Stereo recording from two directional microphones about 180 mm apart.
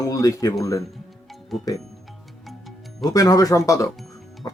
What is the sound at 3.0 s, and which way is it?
Speech, 20° left (ahead or behind).